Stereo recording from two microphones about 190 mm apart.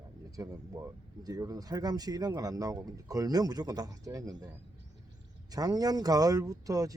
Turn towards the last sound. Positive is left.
turn(degrees=-20)  # may be behind; listen again after turning